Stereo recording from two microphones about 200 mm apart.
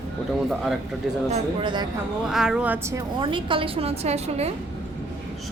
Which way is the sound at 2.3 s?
5° right (ahead or behind).